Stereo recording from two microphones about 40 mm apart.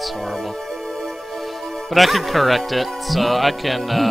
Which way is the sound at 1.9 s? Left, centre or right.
Centre.